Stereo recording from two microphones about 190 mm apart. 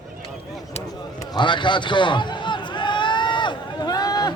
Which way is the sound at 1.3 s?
25° left (ahead or behind).